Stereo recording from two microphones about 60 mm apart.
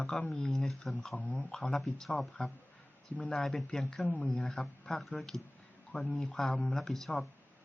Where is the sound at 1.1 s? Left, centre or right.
Left.